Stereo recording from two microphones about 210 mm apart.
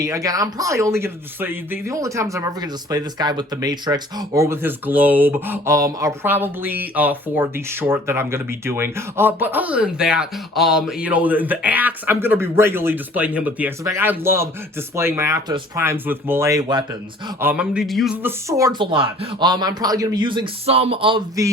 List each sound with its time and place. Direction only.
0.0 s speech: 15° right (ahead or behind)
17.4 s speech: 5° right (ahead or behind)